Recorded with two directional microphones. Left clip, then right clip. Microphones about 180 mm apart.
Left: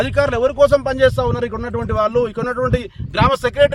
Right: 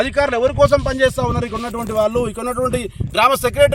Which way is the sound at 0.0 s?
Centre (ahead or behind).